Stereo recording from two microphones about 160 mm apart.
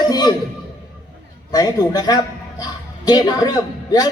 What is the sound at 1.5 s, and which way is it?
A man's voice, 25° left (ahead or behind).